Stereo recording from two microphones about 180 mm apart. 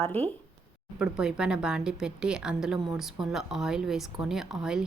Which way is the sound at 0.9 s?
5° right (ahead or behind).